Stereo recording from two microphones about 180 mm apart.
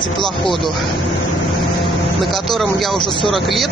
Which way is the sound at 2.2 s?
Centre (ahead or behind).